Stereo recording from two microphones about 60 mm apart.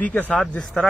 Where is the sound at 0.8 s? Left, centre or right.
Centre.